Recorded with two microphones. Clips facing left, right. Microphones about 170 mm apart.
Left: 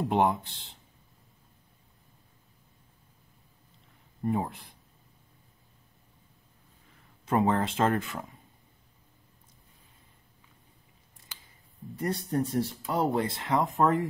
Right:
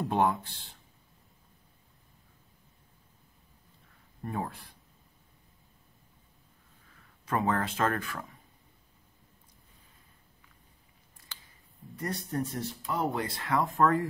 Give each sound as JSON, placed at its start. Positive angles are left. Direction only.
{"t": 0.0, "sound": "speech", "side_deg": 20}
{"t": 4.2, "sound": "speech", "side_deg": 20}
{"t": 7.2, "sound": "speech", "side_deg": 25}
{"t": 12.0, "sound": "speech", "side_deg": 25}
{"t": 13.4, "sound": "speech", "side_deg": 20}